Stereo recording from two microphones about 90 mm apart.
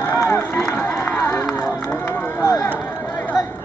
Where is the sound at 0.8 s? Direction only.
25° left (ahead or behind).